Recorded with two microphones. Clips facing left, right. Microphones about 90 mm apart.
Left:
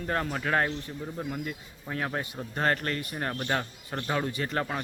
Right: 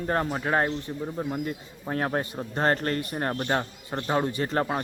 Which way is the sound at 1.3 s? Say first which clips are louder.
Right 4 dB; 40° right (ahead or behind).